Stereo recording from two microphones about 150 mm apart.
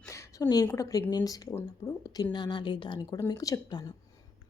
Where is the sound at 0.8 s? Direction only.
25° left (ahead or behind).